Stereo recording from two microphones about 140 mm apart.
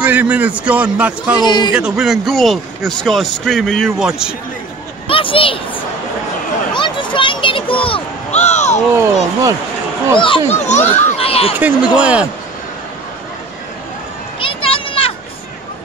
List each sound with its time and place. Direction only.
0.0 s a man's voice: 10° right (ahead or behind)
1.4 s a man's voice: 30° left (ahead or behind)
1.7 s a man's voice: 5° right (ahead or behind)
5.0 s a sound: 40° left (ahead or behind)
6.7 s a sound: 35° left (ahead or behind); by 8.7 s 55° left (ahead or behind)
8.9 s speech: 25° right (ahead or behind)
10.5 s speech: 55° left (ahead or behind)
11.5 s a man's voice: 10° right (ahead or behind)
14.4 s a sound: 40° left (ahead or behind)